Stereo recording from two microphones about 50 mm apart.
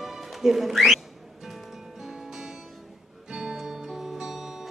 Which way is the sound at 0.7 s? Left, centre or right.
Centre.